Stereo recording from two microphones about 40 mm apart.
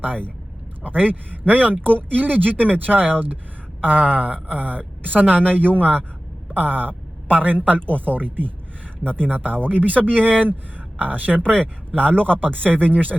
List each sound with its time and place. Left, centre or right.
0.0 s speech: right